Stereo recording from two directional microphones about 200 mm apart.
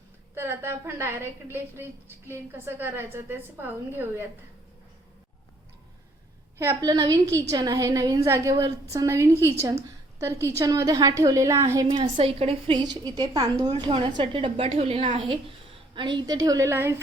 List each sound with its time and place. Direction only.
0.3 s a woman's voice: 10° right (ahead or behind)
6.6 s a woman's voice: 15° right (ahead or behind)
10.6 s a woman's voice: 20° right (ahead or behind)
11.9 s a woman's voice: 30° right (ahead or behind); by 17.0 s 10° right (ahead or behind)